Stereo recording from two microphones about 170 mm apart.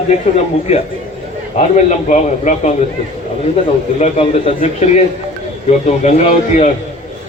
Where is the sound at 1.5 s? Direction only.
45° left (ahead or behind).